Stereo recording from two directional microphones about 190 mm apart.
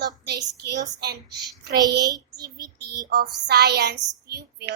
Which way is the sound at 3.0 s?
55° right (ahead or behind).